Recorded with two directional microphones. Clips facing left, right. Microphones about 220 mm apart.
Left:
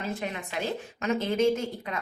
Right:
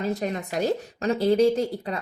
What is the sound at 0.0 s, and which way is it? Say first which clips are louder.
Speech: right 6 dB; 40° right (ahead or behind).